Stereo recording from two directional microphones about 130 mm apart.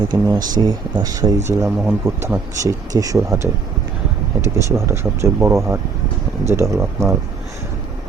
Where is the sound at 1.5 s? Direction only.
15° right (ahead or behind).